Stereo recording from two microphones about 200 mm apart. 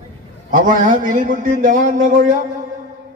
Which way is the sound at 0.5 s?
40° right (ahead or behind).